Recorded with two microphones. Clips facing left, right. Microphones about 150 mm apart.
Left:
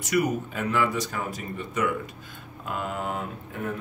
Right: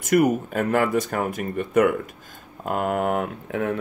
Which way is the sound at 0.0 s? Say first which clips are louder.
Right 6 dB; 50° right (ahead or behind).